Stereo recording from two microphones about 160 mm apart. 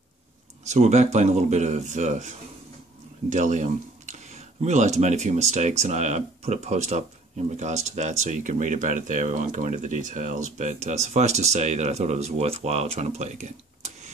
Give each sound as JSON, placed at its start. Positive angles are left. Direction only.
{"t": 0.7, "sound": "speech", "side_deg": -45}